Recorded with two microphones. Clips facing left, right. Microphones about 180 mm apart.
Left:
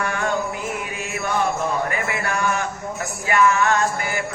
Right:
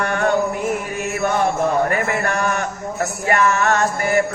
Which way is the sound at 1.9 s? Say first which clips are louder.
Right 5 dB; 55° right (ahead or behind).